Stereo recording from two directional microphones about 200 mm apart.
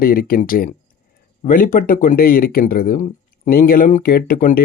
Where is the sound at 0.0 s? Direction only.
45° left (ahead or behind).